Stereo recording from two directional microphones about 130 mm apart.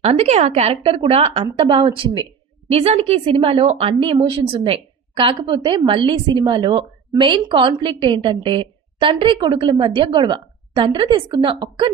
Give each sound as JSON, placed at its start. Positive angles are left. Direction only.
{"t": 0.0, "sound": "speech", "side_deg": -55}
{"t": 2.7, "sound": "a woman's voice", "side_deg": -50}